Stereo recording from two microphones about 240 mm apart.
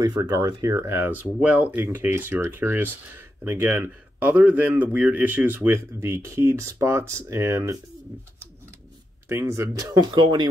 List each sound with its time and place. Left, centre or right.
0.0 s speech: centre
9.3 s speech: centre